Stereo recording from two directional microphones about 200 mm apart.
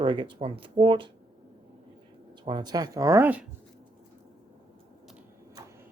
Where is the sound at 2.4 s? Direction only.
20° right (ahead or behind).